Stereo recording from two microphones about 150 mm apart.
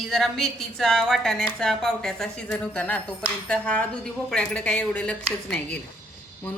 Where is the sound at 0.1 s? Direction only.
Centre (ahead or behind).